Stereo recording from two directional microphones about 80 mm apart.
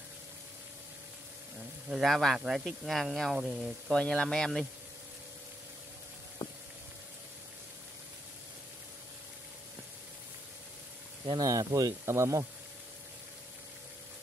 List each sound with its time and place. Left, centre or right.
1.9 s speech: centre
3.9 s speech: centre
11.4 s speech: right